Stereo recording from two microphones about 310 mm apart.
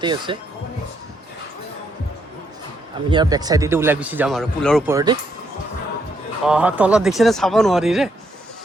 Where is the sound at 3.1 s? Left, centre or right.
Centre.